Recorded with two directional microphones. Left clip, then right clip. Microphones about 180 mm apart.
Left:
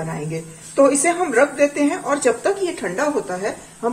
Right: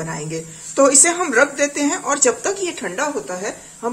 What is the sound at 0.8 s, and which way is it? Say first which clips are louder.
Speech: right 1 dB; 35° right (ahead or behind).